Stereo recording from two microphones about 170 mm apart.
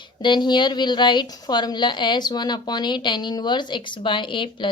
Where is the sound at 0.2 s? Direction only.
25° left (ahead or behind).